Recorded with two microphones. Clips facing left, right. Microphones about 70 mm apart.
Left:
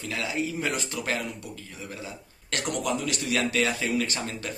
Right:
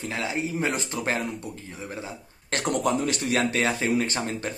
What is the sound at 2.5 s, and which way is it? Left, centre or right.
Speech, right.